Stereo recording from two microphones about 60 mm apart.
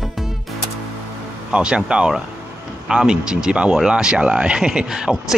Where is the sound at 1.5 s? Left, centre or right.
Centre.